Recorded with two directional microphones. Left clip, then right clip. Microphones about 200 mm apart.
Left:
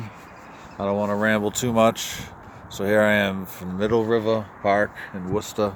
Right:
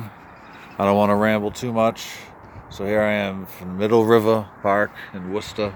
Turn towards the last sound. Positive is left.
turn(degrees=10)  # may be behind; listen again after turning